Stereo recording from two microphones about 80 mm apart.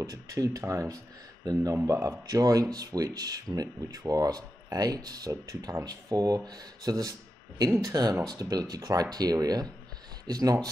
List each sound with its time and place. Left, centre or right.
0.0 s speech: right